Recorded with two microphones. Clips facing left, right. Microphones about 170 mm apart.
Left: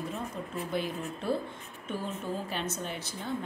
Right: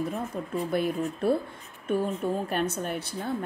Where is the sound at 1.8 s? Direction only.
55° right (ahead or behind).